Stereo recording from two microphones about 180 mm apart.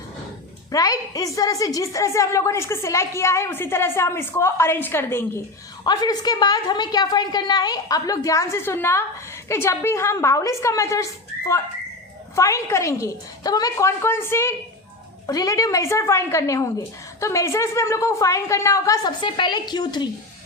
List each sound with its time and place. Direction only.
0.7 s a woman's voice: 20° left (ahead or behind)